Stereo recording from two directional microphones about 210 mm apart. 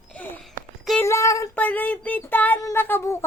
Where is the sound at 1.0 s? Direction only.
15° left (ahead or behind).